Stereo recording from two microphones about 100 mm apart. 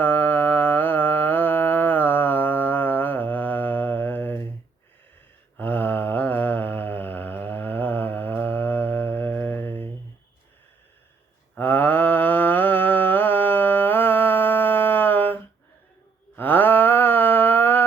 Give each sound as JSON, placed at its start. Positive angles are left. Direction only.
{"t": 0.0, "sound": "music", "side_deg": 20}
{"t": 5.5, "sound": "mantra", "side_deg": 20}
{"t": 11.5, "sound": "mantra", "side_deg": 20}